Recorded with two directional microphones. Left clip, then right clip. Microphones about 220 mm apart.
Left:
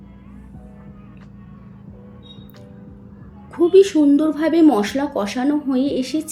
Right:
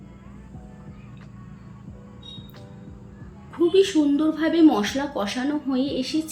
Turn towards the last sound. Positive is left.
turn(degrees=25)  # may be behind; listen again after turning